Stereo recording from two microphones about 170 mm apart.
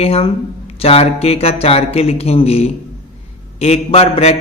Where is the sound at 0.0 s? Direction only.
35° left (ahead or behind).